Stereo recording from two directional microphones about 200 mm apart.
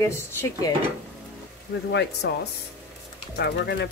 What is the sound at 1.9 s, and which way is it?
Speech, 55° left (ahead or behind).